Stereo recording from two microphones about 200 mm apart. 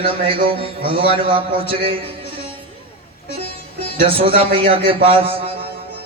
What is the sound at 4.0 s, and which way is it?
A man's voice, 30° right (ahead or behind).